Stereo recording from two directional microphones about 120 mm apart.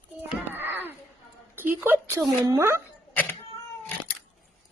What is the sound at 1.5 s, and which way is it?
A woman's voice, 15° right (ahead or behind).